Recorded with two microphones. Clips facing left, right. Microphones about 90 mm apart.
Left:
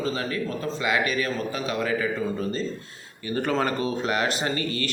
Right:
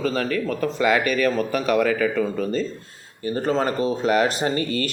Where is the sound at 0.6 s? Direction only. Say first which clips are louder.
Right 5 dB; 20° left (ahead or behind).